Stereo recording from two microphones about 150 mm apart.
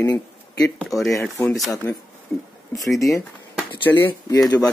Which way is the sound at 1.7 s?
20° left (ahead or behind).